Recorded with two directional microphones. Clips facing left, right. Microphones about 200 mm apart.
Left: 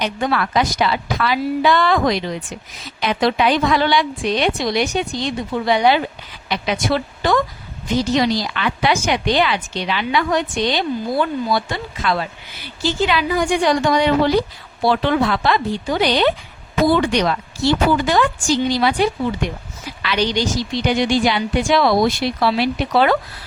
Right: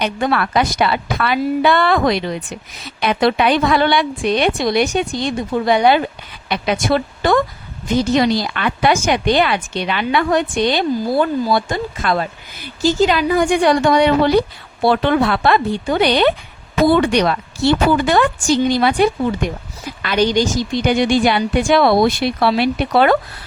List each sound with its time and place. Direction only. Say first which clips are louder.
0.0 s a woman's voice: right 2 dB; 60° right (ahead or behind)